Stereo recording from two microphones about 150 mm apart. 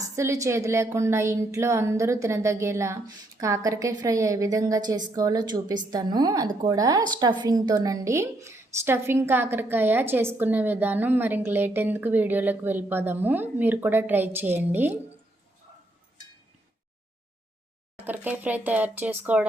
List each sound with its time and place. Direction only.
0.2 s a woman's voice: 20° right (ahead or behind)
17.9 s a woman's voice: 10° right (ahead or behind)